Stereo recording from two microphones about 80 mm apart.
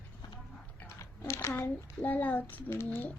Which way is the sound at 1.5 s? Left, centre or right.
Left.